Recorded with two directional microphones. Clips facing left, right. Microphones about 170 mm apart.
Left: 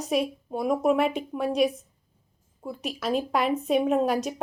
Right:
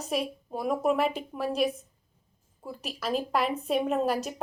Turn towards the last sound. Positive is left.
turn(degrees=0)  # may be behind; listen again after turning